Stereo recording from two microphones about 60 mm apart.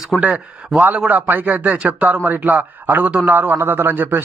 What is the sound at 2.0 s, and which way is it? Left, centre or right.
A man's voice, right.